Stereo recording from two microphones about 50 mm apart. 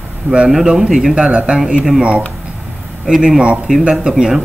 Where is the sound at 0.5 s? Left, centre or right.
Centre.